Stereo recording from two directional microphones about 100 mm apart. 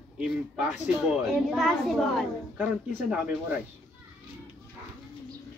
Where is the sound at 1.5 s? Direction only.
5° left (ahead or behind).